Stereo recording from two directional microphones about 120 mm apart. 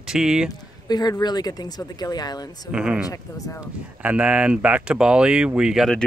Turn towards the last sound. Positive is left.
turn(degrees=0)  # may be behind; listen again after turning